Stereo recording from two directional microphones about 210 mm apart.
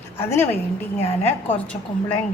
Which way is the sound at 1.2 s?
5° left (ahead or behind).